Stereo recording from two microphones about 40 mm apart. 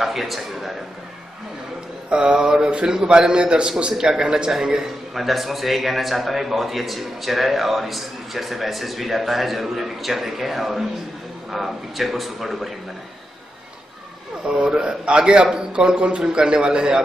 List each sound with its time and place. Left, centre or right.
0.0 s a man's voice: centre
2.0 s a man's voice: right
5.1 s a man's voice: centre
14.5 s a man's voice: centre